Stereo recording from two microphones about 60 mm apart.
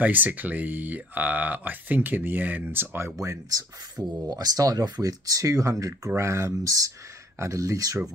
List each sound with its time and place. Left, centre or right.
0.0 s speech: right
3.2 s speech: right
4.0 s speech: right
4.3 s speech: right
7.3 s speech: right